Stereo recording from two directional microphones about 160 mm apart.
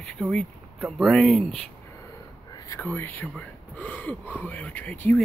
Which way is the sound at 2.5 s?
25° left (ahead or behind).